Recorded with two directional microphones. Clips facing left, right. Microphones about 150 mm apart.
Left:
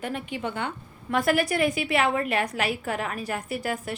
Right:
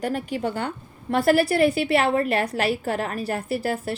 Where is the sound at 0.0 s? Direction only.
40° right (ahead or behind).